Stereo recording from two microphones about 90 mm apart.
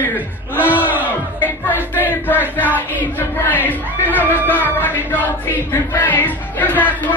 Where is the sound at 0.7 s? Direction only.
20° right (ahead or behind).